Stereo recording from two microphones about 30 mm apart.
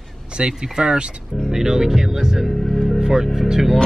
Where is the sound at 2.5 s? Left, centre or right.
Centre.